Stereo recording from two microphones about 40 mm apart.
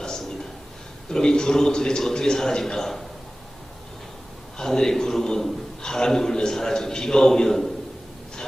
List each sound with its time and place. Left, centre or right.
1.1 s a man's voice: centre
4.5 s a man's voice: centre